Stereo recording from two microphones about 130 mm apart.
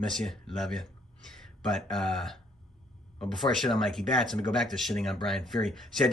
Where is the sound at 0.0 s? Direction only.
5° left (ahead or behind).